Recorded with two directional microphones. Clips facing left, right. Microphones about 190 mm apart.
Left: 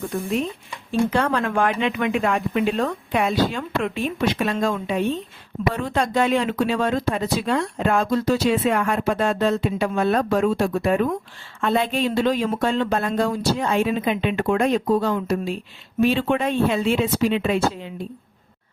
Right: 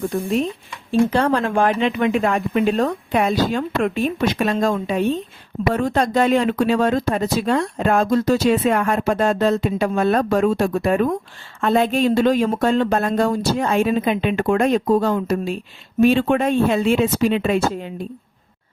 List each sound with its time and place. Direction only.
0.9 s speech: 35° right (ahead or behind); by 17.9 s 50° right (ahead or behind)